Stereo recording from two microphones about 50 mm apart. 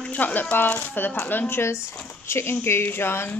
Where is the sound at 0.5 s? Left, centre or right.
Left.